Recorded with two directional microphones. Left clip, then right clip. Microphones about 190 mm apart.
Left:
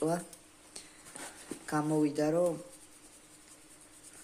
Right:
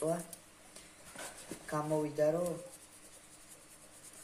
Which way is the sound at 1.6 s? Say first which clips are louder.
Left 4 dB; 55° left (ahead or behind).